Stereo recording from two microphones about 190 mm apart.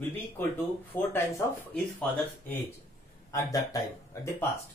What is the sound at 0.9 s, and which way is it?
Speech, 10° left (ahead or behind).